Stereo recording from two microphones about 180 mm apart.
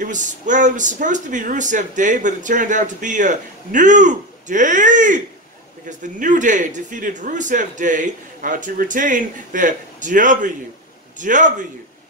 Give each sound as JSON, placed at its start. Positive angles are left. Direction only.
{"t": 0.0, "sound": "speech", "side_deg": -45}